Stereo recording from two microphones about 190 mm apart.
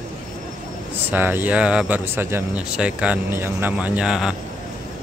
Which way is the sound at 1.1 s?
10° right (ahead or behind).